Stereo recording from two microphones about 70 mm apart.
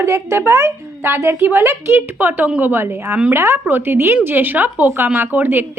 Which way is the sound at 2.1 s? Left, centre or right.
Right.